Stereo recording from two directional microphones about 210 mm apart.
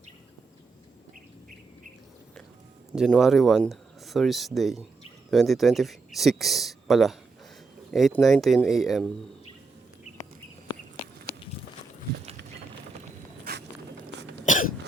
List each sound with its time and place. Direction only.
2.9 s speech: centre (ahead or behind)
14.4 s cough: 35° left (ahead or behind)